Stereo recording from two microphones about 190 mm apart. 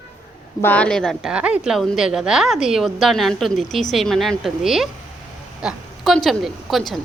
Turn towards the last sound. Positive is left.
turn(degrees=0)  # may be behind; listen again after turning